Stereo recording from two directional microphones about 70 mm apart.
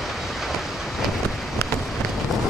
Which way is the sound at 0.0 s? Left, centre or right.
Centre.